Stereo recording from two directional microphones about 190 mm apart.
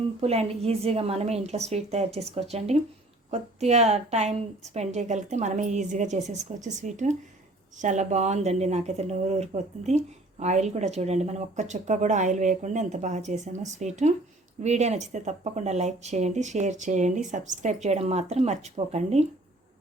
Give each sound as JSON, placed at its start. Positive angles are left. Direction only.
{"t": 0.2, "sound": "speech", "side_deg": -30}